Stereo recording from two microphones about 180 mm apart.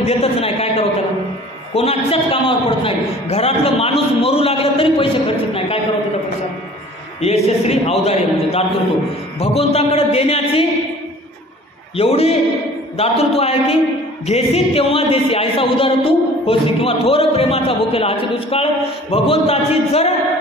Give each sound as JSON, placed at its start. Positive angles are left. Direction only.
{"t": 0.0, "sound": "a sound", "side_deg": 35}
{"t": 1.7, "sound": "speech", "side_deg": 35}
{"t": 7.2, "sound": "speech", "side_deg": 35}
{"t": 12.0, "sound": "speech", "side_deg": 35}